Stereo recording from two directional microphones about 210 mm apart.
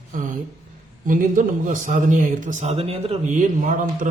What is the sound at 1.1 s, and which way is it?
A man's voice, 40° right (ahead or behind).